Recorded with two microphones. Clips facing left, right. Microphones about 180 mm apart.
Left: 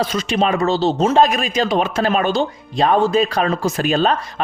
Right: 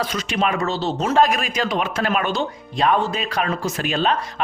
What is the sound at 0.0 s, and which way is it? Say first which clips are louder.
A man's voice: left 4 dB; 30° left (ahead or behind).